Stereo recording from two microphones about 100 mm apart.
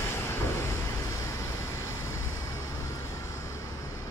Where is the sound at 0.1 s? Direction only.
30° left (ahead or behind).